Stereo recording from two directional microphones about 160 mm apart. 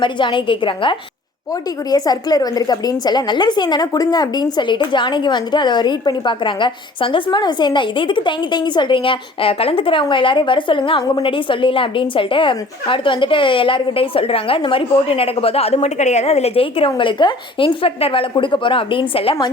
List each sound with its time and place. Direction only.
0.0 s a woman's voice: 30° left (ahead or behind)